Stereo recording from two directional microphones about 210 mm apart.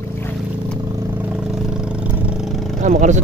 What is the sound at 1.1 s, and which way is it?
Vehicle, 5° right (ahead or behind).